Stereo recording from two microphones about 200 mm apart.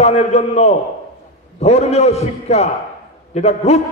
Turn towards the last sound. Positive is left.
turn(degrees=35)  # may be behind; listen again after turning